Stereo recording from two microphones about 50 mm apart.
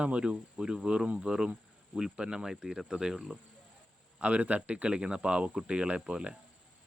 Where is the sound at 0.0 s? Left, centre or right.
Right.